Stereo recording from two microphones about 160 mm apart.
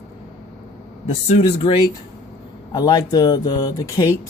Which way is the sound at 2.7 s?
25° left (ahead or behind).